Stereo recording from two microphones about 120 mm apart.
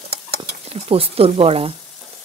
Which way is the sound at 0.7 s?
55° right (ahead or behind).